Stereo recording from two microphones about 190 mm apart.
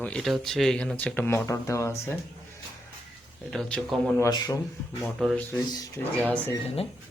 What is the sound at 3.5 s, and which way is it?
Speech, 5° left (ahead or behind).